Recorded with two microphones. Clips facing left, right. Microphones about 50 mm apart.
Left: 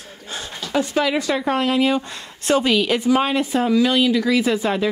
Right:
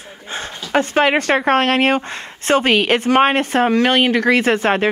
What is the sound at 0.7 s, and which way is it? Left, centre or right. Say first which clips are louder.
A woman's voice: right 5 dB; right.